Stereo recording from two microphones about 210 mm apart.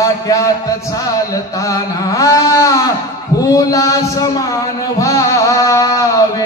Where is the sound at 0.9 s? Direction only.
15° left (ahead or behind).